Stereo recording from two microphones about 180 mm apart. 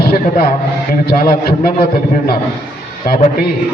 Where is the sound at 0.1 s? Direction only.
55° left (ahead or behind).